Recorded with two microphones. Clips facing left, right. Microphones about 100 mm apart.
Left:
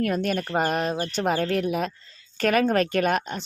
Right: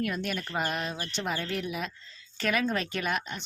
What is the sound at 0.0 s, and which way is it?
A woman's voice, 45° left (ahead or behind).